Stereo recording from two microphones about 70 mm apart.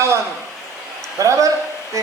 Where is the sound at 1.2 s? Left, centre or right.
Right.